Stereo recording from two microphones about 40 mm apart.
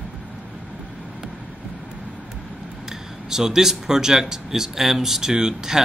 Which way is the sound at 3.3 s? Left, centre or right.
Centre.